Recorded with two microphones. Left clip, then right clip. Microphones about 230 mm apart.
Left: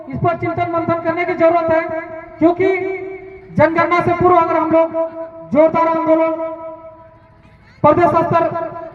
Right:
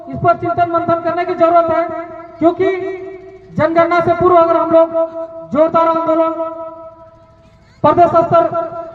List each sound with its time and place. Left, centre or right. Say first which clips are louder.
0.1 s speech: right 4 dB; left
7.8 s a man's voice: right 2 dB; left